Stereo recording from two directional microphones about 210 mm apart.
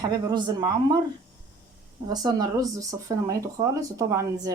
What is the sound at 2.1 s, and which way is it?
Speech, 20° right (ahead or behind).